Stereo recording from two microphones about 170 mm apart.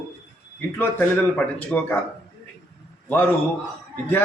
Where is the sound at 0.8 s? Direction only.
10° left (ahead or behind).